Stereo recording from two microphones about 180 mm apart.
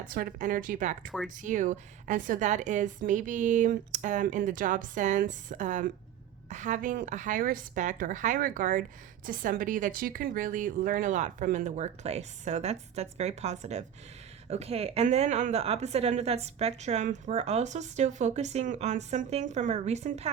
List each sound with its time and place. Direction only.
0.0 s a woman's voice: 50° right (ahead or behind)